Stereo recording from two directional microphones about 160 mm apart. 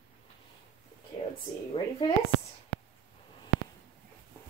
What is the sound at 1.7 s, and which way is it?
Speech, 35° left (ahead or behind).